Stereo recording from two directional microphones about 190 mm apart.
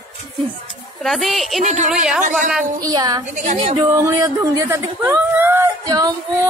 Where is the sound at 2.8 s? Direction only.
20° right (ahead or behind).